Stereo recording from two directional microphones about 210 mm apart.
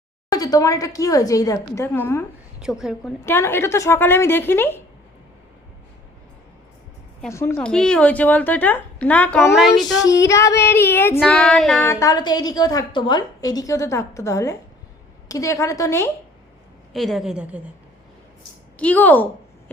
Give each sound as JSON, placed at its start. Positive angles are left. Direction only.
{"t": 0.3, "sound": "a woman's voice", "side_deg": 15}
{"t": 2.6, "sound": "child singing", "side_deg": -5}
{"t": 3.2, "sound": "a woman's voice", "side_deg": 10}
{"t": 7.3, "sound": "a woman's voice", "side_deg": 10}
{"t": 11.2, "sound": "child singing", "side_deg": 5}
{"t": 11.9, "sound": "a woman's voice", "side_deg": 15}
{"t": 16.9, "sound": "child singing", "side_deg": 0}
{"t": 18.8, "sound": "a woman's voice", "side_deg": 5}